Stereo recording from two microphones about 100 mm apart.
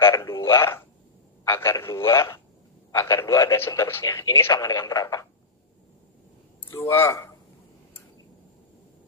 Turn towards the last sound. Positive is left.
turn(degrees=25)  # may be behind; listen again after turning